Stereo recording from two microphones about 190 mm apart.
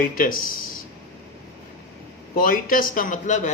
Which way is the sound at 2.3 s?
50° left (ahead or behind).